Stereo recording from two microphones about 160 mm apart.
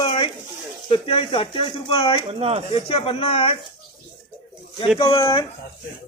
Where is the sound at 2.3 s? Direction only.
35° right (ahead or behind).